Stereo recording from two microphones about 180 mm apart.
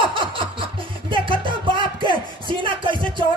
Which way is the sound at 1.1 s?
30° right (ahead or behind).